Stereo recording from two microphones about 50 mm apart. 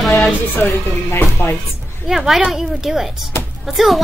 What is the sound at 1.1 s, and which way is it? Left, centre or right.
Speech, left.